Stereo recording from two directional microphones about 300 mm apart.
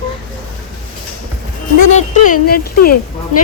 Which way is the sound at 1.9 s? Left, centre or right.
Left.